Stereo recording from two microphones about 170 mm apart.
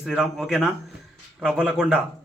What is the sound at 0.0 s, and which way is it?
A man's voice, 5° right (ahead or behind).